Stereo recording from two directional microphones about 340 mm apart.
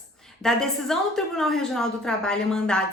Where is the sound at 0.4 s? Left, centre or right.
Centre.